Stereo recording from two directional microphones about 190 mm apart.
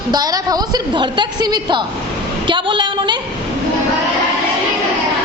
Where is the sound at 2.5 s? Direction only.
25° right (ahead or behind).